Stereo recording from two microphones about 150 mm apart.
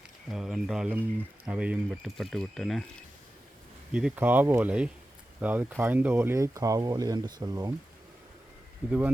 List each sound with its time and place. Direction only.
0.3 s speech: 5° right (ahead or behind)
3.9 s speech: 10° right (ahead or behind); by 7.7 s 25° right (ahead or behind)
8.9 s speech: 10° right (ahead or behind)